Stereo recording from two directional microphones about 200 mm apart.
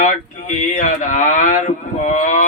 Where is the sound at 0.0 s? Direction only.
40° left (ahead or behind).